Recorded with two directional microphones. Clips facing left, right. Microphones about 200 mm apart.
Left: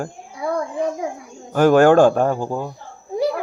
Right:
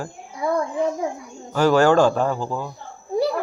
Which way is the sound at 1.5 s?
55° left (ahead or behind).